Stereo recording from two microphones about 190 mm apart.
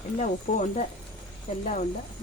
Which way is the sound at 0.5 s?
40° left (ahead or behind).